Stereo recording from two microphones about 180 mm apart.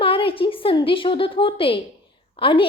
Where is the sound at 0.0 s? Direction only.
30° left (ahead or behind).